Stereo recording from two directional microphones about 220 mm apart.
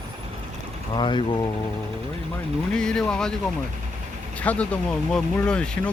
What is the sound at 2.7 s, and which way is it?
Speech, 5° left (ahead or behind).